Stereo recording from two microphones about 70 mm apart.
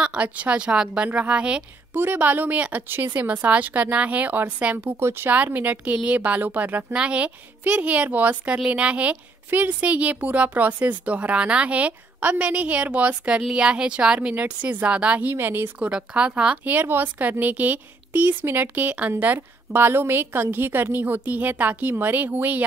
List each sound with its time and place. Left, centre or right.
0.0 s speech: centre
2.0 s a woman's voice: right
4.9 s speech: right
5.3 s a woman's voice: right
15.8 s a woman's voice: centre